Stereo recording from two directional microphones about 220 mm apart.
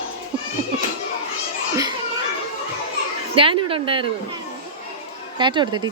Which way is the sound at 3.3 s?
25° right (ahead or behind).